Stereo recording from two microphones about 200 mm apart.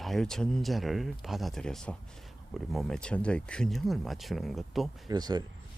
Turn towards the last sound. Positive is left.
turn(degrees=-20)  # may be behind; listen again after turning